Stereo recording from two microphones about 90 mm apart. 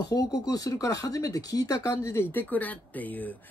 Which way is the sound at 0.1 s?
40° left (ahead or behind).